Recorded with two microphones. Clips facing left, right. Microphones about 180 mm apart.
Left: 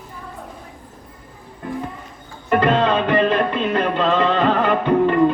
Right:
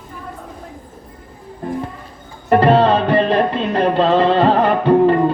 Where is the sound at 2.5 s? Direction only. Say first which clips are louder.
Right 5 dB; 35° right (ahead or behind).